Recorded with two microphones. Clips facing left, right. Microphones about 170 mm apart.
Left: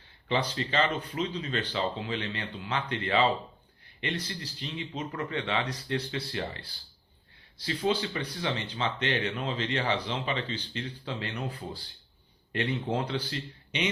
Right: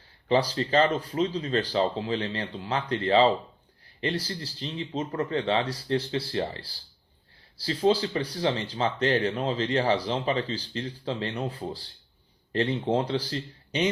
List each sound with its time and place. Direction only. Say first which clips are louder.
0.3 s speech: right 6 dB; 35° right (ahead or behind)